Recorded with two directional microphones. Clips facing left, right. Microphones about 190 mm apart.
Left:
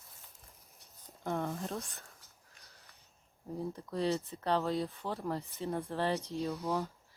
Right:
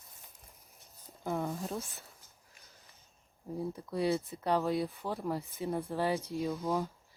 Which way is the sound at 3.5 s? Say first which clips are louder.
Right 2 dB; 10° right (ahead or behind).